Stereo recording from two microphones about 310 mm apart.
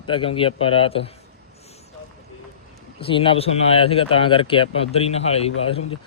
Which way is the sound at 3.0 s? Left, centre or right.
Centre.